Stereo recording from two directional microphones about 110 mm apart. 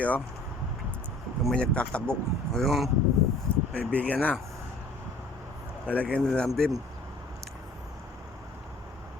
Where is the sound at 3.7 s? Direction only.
15° left (ahead or behind).